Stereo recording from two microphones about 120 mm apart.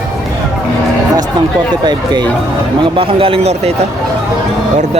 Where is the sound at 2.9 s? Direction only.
50° right (ahead or behind).